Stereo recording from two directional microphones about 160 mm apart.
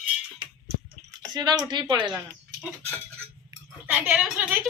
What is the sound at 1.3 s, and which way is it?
Speech, 25° right (ahead or behind).